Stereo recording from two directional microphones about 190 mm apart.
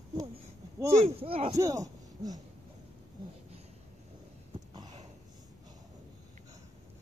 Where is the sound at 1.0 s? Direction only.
30° right (ahead or behind).